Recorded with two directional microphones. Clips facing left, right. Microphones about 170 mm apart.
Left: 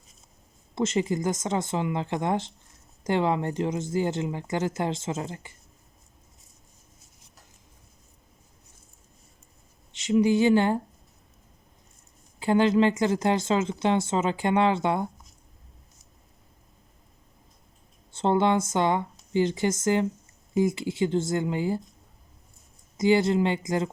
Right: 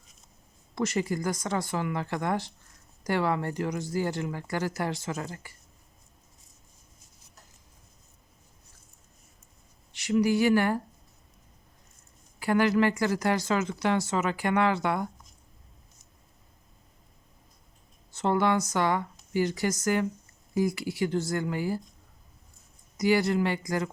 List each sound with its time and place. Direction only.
0.8 s a woman's voice: 20° left (ahead or behind)
9.9 s speech: 20° left (ahead or behind)
12.4 s a woman's voice: 25° left (ahead or behind)
18.1 s a woman's voice: 25° left (ahead or behind)
23.0 s a woman's voice: 25° left (ahead or behind)